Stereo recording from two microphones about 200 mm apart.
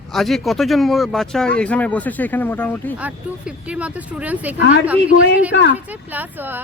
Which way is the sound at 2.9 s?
5° right (ahead or behind).